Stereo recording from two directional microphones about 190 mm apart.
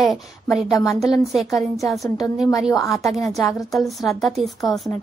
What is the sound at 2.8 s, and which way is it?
Speech, 15° left (ahead or behind).